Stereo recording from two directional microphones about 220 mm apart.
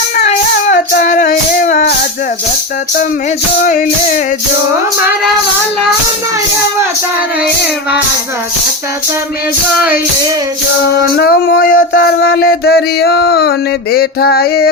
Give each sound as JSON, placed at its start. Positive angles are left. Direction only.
{"t": 0.2, "sound": "music", "side_deg": 35}
{"t": 3.7, "sound": "music", "side_deg": 35}
{"t": 11.2, "sound": "a sound", "side_deg": 45}